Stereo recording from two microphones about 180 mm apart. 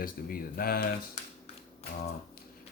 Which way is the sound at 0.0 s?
55° left (ahead or behind).